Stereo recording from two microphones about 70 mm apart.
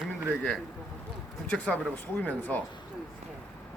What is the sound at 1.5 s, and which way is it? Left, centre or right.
Speech, centre.